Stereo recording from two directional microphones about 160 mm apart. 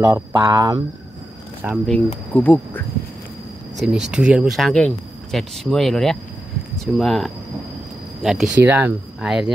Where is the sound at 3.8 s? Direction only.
5° right (ahead or behind).